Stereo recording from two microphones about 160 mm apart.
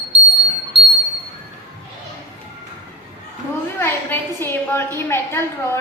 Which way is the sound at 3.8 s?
15° left (ahead or behind).